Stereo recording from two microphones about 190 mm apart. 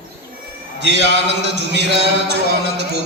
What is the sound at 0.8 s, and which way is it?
A man's voice, 65° right (ahead or behind).